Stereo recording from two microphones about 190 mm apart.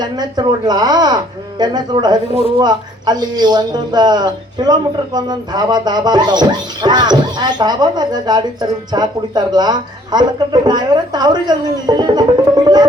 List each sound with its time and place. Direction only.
0.0 s speech: 20° right (ahead or behind)
12.6 s music: 20° right (ahead or behind)